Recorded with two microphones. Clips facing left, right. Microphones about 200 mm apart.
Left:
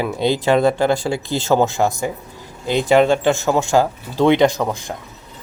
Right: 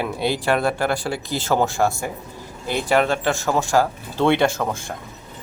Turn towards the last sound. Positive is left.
turn(degrees=15)  # may be behind; listen again after turning